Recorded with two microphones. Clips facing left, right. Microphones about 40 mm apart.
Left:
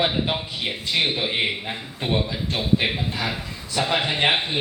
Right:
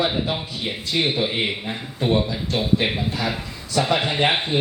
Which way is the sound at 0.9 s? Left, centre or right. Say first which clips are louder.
Right 1 dB; left.